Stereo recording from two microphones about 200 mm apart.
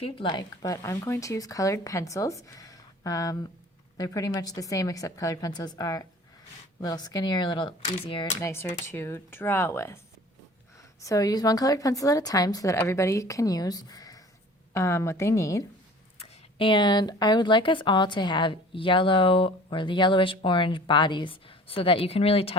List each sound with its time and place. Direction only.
0.0 s speech: 25° left (ahead or behind)
11.0 s speech: 15° left (ahead or behind)